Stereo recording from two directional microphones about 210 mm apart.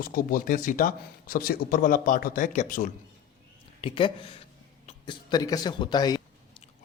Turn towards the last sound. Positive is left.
turn(degrees=20)  # may be behind; listen again after turning